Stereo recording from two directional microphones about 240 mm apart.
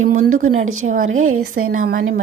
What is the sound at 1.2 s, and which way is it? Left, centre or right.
Speech, right.